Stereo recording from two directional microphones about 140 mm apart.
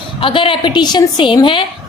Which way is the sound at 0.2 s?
40° left (ahead or behind).